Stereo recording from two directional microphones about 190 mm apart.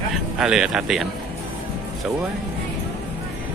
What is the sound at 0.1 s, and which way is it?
Speech, 5° right (ahead or behind).